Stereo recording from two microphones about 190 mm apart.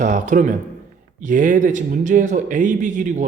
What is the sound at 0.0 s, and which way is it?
Speech, 40° right (ahead or behind).